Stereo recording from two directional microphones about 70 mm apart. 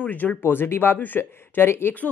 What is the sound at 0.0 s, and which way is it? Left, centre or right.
Speech, left.